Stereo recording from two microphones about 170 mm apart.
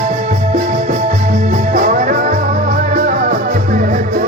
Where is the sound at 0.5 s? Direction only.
45° right (ahead or behind).